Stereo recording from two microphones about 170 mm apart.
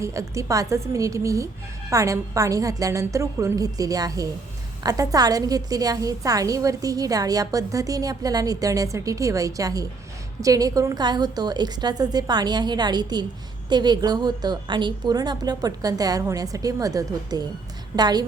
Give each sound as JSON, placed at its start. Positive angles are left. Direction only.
{"t": 0.0, "sound": "a woman's voice", "side_deg": -20}